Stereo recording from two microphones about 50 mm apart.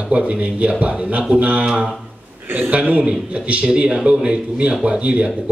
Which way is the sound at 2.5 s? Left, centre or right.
Right.